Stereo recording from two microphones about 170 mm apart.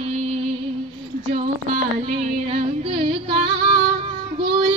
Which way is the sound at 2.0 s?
35° right (ahead or behind).